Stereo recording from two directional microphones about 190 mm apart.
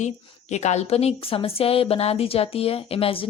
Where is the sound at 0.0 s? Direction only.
35° left (ahead or behind).